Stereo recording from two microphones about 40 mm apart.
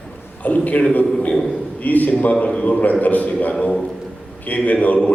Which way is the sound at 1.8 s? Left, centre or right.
Left.